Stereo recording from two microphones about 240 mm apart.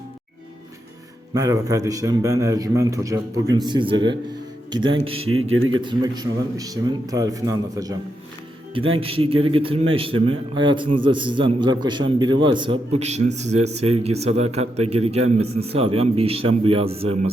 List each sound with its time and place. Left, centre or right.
1.3 s a man's voice: centre
5.2 s speech: right
5.8 s a man's voice: centre
9.0 s a man's voice: right